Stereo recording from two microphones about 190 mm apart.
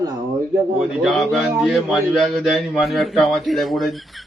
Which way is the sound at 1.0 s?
Centre (ahead or behind).